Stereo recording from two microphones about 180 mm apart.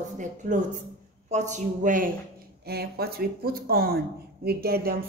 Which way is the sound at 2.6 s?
60° right (ahead or behind).